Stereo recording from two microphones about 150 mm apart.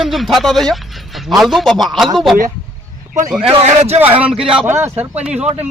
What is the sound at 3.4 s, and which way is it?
Speech, 45° right (ahead or behind).